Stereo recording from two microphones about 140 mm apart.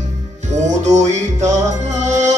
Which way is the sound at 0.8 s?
55° right (ahead or behind).